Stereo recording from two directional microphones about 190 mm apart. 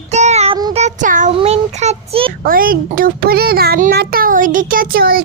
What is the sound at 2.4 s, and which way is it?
A child's voice, 50° right (ahead or behind).